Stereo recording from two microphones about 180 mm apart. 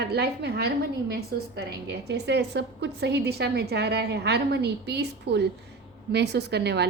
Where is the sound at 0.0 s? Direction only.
65° right (ahead or behind).